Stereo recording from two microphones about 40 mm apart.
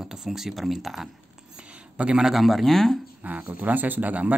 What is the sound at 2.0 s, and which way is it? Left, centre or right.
Speech, right.